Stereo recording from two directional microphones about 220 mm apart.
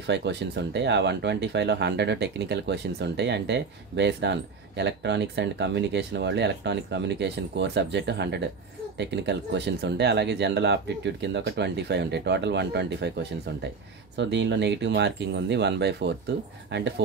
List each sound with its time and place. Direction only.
0.0 s speech: 50° right (ahead or behind)